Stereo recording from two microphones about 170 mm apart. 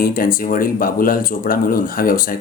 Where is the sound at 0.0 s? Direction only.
55° left (ahead or behind).